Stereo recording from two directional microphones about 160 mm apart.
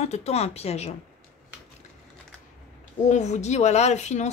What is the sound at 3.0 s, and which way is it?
Speech, 45° left (ahead or behind).